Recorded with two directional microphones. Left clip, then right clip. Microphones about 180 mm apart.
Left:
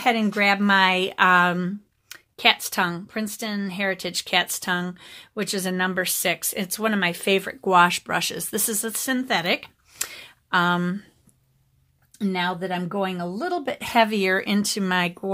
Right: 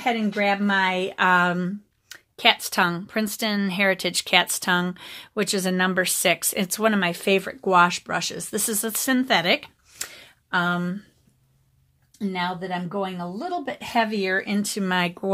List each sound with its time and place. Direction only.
0.0 s speech: 30° left (ahead or behind); by 9.7 s 5° right (ahead or behind)
9.9 s a sound: 15° left (ahead or behind)
12.2 s speech: 40° left (ahead or behind); by 14.9 s 20° left (ahead or behind)
14.9 s speech: centre (ahead or behind)